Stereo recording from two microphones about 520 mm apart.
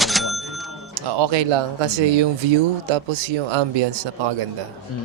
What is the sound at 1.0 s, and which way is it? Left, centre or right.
Speech, right.